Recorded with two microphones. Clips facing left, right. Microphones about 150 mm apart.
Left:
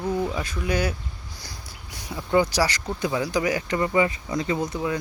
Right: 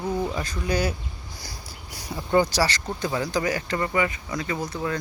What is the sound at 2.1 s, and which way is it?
Speech, 5° right (ahead or behind).